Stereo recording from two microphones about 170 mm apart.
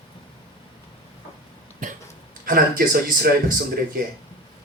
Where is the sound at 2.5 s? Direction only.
55° right (ahead or behind).